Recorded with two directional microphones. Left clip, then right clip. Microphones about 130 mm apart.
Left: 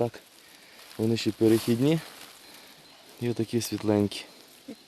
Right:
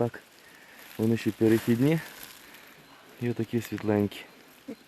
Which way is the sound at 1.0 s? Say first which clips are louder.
Left 1 dB; 20° left (ahead or behind).